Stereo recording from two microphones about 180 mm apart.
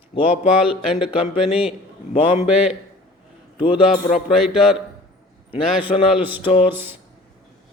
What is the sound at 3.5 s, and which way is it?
Speech, 30° left (ahead or behind).